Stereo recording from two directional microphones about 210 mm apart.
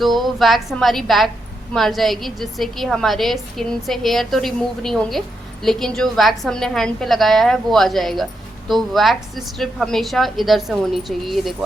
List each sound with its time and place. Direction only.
0.0 s a woman's voice: centre (ahead or behind)